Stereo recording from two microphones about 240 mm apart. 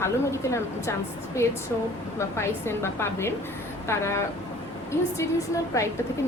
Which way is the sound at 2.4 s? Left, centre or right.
Centre.